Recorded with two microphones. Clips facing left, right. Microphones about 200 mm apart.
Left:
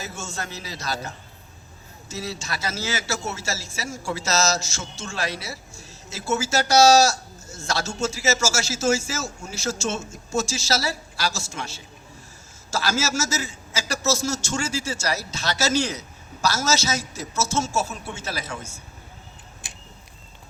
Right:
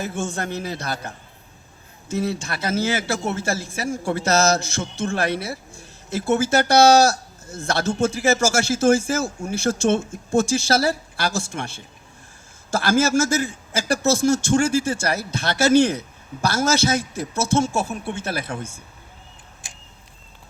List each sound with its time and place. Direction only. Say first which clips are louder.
0.0 s a man's voice: right 7 dB; 55° right (ahead or behind)